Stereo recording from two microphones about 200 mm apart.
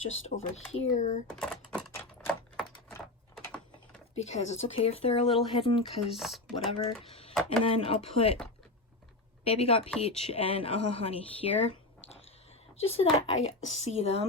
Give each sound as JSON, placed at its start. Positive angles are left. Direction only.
{"t": 0.5, "sound": "speech", "side_deg": 35}
{"t": 1.3, "sound": "typewriter", "side_deg": 5}
{"t": 3.3, "sound": "a sound", "side_deg": 5}
{"t": 4.1, "sound": "speech", "side_deg": 35}
{"t": 6.1, "sound": "speech", "side_deg": 0}
{"t": 6.7, "sound": "speech", "side_deg": 30}
{"t": 9.4, "sound": "speech", "side_deg": 30}
{"t": 12.8, "sound": "speech", "side_deg": 30}